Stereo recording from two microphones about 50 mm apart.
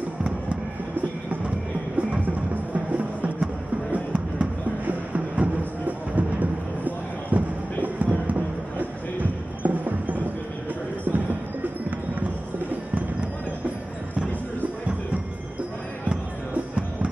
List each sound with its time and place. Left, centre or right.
2.0 s music: right